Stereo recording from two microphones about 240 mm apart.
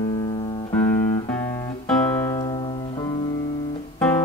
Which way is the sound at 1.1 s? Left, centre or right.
Centre.